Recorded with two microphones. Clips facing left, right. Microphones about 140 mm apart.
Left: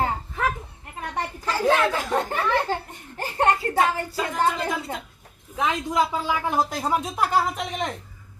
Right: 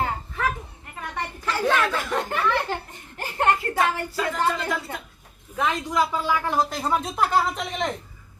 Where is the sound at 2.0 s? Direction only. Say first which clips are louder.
Left 1 dB; 30° left (ahead or behind).